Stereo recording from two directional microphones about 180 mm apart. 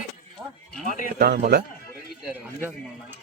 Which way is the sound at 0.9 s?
50° left (ahead or behind).